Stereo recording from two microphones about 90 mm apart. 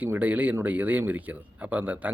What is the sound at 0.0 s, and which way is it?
Speech, 20° right (ahead or behind).